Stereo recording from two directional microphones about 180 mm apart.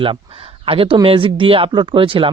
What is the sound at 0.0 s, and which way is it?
Speech, 30° right (ahead or behind).